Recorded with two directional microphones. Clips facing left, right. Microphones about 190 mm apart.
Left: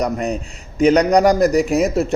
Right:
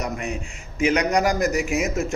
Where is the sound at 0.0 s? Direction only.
35° left (ahead or behind).